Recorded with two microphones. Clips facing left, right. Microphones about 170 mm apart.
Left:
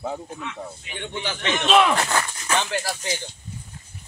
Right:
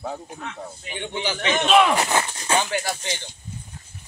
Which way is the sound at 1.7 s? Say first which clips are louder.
Even; centre (ahead or behind).